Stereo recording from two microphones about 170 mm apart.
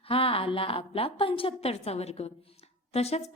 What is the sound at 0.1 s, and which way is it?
A woman's voice, 35° left (ahead or behind).